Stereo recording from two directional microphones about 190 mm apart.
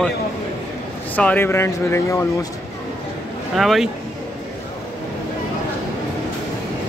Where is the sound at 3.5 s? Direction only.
Centre (ahead or behind).